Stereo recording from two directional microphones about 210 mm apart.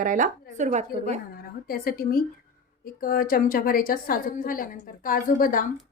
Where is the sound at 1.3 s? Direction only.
45° left (ahead or behind).